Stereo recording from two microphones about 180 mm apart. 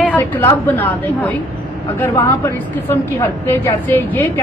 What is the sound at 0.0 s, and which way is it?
A woman's voice, 10° left (ahead or behind).